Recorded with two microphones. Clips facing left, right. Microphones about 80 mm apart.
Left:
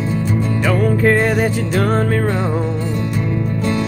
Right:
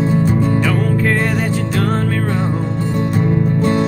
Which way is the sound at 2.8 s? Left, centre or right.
Right.